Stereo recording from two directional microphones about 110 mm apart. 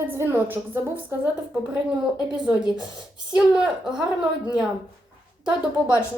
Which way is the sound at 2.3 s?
5° right (ahead or behind).